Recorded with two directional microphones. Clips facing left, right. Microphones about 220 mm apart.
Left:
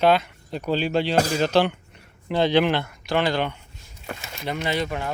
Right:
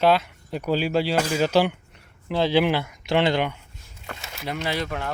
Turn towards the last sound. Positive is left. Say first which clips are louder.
# left 2 dB
turn(degrees=0)  # may be behind; listen again after turning